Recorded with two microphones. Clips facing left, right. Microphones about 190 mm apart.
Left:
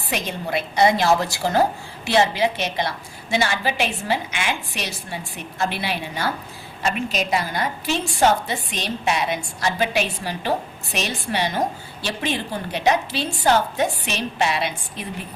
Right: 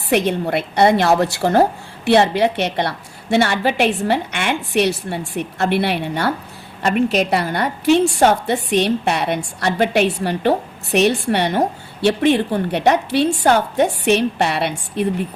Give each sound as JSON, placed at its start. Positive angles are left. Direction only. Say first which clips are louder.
{"t": 0.1, "sound": "a woman's voice", "louder": "right 8 dB", "side_deg": -60}